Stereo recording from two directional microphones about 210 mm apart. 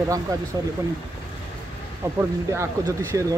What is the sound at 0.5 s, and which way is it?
Speech, 20° right (ahead or behind).